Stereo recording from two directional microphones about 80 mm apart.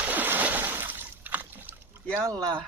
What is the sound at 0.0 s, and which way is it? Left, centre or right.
Splash, right.